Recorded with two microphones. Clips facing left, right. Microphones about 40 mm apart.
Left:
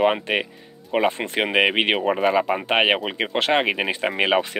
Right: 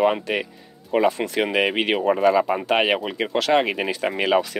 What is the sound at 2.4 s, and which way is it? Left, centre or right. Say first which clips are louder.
Speech: right 1 dB; centre.